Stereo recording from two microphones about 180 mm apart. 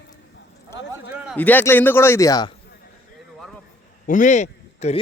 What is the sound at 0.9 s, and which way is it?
Speech, 10° right (ahead or behind).